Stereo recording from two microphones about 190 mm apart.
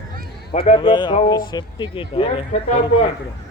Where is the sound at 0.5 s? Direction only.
30° left (ahead or behind).